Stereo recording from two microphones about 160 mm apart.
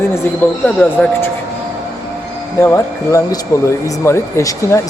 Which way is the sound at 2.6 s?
20° left (ahead or behind).